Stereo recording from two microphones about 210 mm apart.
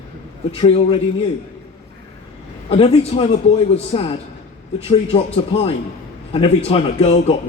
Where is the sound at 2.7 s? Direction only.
25° left (ahead or behind).